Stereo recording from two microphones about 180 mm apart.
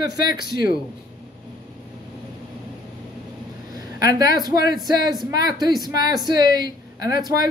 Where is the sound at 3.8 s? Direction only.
20° right (ahead or behind).